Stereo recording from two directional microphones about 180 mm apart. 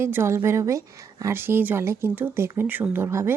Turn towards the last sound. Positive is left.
turn(degrees=-15)  # may be behind; listen again after turning